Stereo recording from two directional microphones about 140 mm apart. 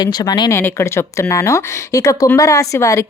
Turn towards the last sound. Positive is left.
turn(degrees=20)  # may be behind; listen again after turning